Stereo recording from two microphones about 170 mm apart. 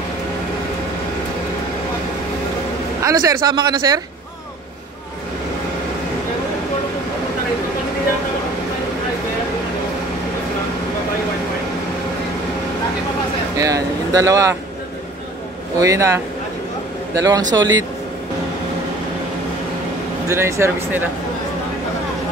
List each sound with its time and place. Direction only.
3.0 s speech: 20° right (ahead or behind)
13.6 s speech: 20° right (ahead or behind)
15.8 s speech: 20° right (ahead or behind)
20.2 s speech: 15° right (ahead or behind)